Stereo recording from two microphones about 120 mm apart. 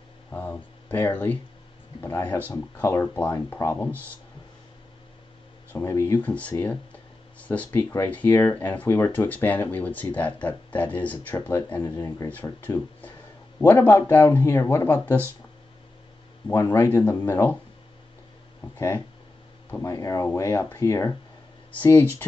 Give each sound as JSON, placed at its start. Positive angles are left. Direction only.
{"t": 0.3, "sound": "a sound", "side_deg": 15}
{"t": 0.9, "sound": "speech", "side_deg": 15}
{"t": 3.8, "sound": "speech", "side_deg": 10}
{"t": 5.7, "sound": "speech", "side_deg": 20}
{"t": 6.2, "sound": "speech", "side_deg": 10}
{"t": 6.6, "sound": "a sound", "side_deg": 10}
{"t": 7.9, "sound": "speech", "side_deg": 15}
{"t": 16.5, "sound": "speech", "side_deg": 25}
{"t": 18.8, "sound": "speech", "side_deg": 20}
{"t": 21.7, "sound": "speech", "side_deg": 15}